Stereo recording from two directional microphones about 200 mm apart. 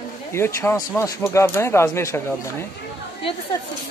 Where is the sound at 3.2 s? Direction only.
25° left (ahead or behind).